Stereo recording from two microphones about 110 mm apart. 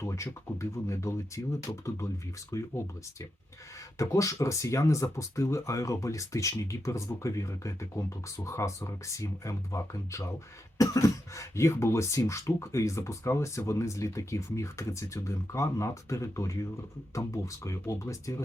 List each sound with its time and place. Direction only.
0.0 s speech: 25° left (ahead or behind)